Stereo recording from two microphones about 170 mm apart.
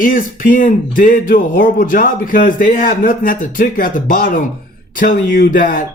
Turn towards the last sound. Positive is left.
turn(degrees=55)  # may be behind; listen again after turning